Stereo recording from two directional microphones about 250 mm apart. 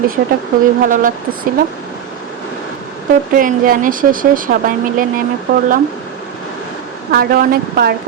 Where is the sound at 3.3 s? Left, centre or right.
Right.